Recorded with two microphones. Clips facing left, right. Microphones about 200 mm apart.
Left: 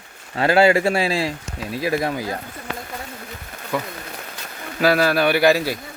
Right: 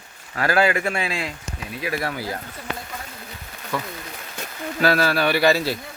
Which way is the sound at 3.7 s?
15° left (ahead or behind).